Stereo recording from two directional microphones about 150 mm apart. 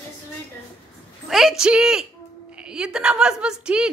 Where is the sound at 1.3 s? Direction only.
Centre (ahead or behind).